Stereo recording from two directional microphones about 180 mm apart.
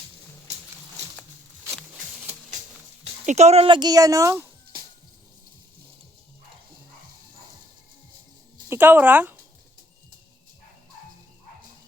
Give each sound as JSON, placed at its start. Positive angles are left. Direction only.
{"t": 3.2, "sound": "speech", "side_deg": -40}
{"t": 8.7, "sound": "speech", "side_deg": -10}